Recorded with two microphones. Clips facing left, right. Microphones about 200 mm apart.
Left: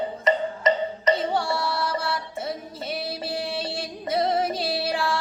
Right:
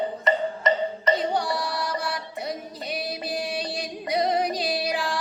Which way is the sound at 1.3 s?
15° right (ahead or behind).